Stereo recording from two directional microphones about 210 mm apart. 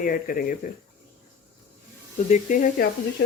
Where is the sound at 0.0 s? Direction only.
40° left (ahead or behind).